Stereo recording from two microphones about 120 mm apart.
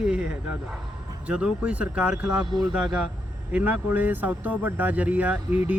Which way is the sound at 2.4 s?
35° right (ahead or behind).